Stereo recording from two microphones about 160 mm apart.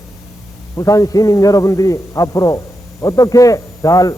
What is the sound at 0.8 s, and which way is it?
A man's voice, 20° left (ahead or behind).